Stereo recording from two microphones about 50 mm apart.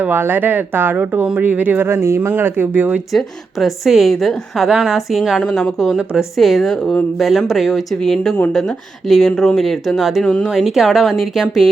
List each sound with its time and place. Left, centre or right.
0.0 s speech: right
1.9 s speech: right
2.4 s speech: right
3.1 s a woman's voice: centre
8.0 s a woman's voice: centre
10.2 s speech: centre
10.5 s a woman's voice: centre